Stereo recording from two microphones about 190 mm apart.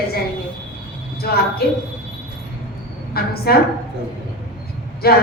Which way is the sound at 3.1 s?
55° left (ahead or behind).